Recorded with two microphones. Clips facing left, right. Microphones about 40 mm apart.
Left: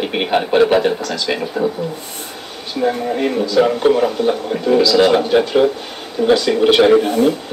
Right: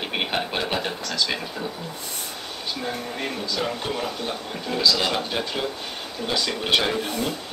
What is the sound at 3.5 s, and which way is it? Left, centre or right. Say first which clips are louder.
A man's voice: left 16 dB; left.